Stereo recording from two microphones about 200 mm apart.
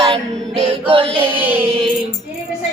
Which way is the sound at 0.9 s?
25° right (ahead or behind).